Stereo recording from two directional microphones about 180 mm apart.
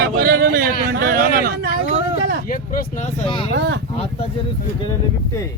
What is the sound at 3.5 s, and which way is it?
Speech, 75° right (ahead or behind).